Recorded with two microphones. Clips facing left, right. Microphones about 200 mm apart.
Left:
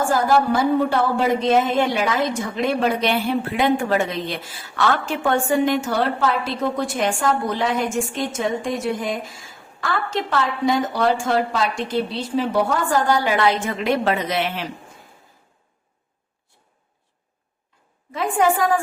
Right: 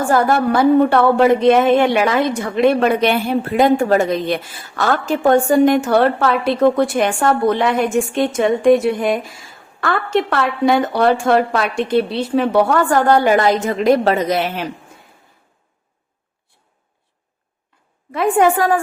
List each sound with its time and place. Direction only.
0.1 s a woman's voice: 60° right (ahead or behind); by 14.7 s 45° right (ahead or behind)
18.1 s a woman's voice: 65° right (ahead or behind)